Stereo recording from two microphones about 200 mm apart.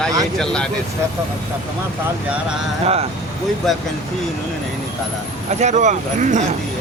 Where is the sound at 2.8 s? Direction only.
30° right (ahead or behind).